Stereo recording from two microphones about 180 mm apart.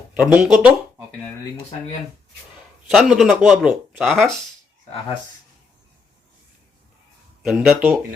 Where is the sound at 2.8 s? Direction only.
Centre (ahead or behind).